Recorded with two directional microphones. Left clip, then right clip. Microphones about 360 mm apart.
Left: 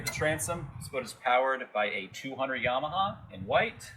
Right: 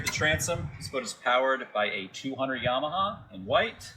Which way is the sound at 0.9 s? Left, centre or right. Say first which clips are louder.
Right 1 dB; centre.